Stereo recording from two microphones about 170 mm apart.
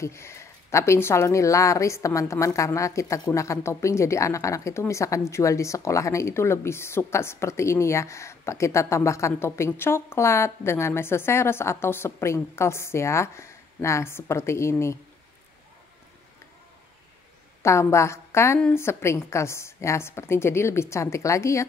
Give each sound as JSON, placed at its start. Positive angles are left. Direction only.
{"t": 0.0, "sound": "speech", "side_deg": 15}
{"t": 17.6, "sound": "a woman's voice", "side_deg": 15}